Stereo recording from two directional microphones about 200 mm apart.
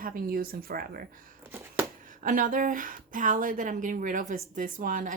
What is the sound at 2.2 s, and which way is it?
Speech, 45° right (ahead or behind).